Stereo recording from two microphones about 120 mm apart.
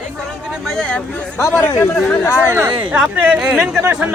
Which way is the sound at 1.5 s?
15° left (ahead or behind).